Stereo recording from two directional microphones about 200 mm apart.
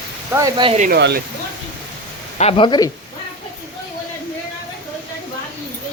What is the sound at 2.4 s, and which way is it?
Speech, 25° left (ahead or behind).